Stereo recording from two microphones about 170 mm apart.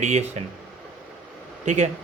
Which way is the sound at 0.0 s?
40° right (ahead or behind).